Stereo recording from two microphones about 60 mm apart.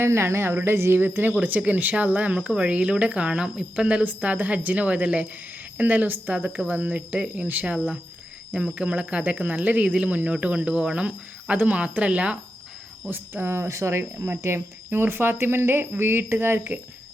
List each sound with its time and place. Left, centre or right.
0.0 s speech: right
13.1 s speech: right